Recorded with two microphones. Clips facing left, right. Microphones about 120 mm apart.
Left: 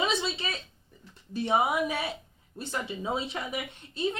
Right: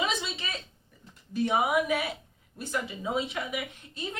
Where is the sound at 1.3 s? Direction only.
30° left (ahead or behind).